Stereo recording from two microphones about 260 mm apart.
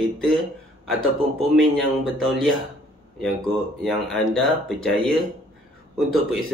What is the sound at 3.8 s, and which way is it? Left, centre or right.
Speech, centre.